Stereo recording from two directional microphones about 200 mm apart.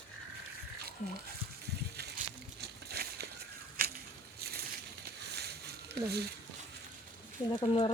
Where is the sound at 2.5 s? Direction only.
55° right (ahead or behind).